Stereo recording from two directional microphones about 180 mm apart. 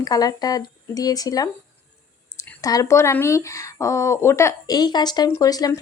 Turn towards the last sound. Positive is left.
turn(degrees=20)  # may be behind; listen again after turning